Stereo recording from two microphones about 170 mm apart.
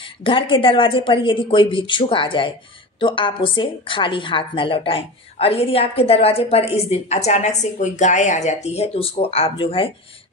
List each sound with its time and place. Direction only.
0.0 s a woman's voice: 30° left (ahead or behind)